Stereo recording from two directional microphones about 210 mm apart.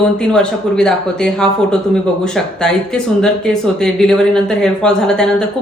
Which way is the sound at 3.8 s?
5° left (ahead or behind).